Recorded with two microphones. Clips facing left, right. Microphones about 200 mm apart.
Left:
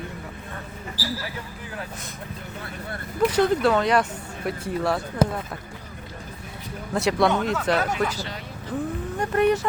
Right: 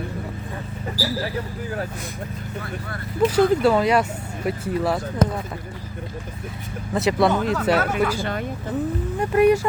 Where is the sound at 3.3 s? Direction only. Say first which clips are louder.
Right 3 dB; 5° right (ahead or behind).